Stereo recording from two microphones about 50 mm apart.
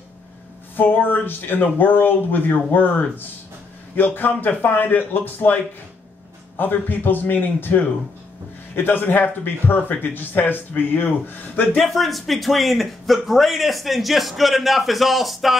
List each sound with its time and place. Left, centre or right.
0.7 s speech: left
11.8 s a man's voice: centre